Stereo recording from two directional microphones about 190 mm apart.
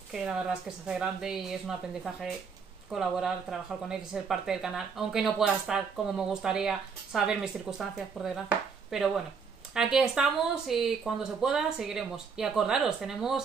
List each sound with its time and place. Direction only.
0.1 s speech: 5° right (ahead or behind)